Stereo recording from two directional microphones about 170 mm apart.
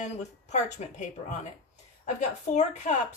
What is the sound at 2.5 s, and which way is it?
Speech, 45° left (ahead or behind).